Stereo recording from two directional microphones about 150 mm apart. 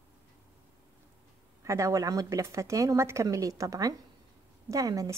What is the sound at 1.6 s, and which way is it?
Speech, 20° right (ahead or behind).